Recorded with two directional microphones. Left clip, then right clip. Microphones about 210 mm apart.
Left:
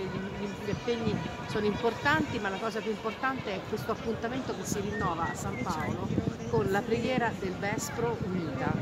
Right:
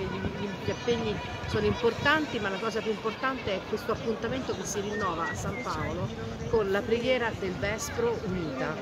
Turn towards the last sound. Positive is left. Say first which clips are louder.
# right 1 dB
turn(degrees=20)  # may be behind; listen again after turning